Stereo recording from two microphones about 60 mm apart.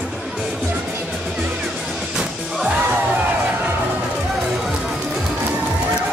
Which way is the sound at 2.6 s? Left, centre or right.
Right.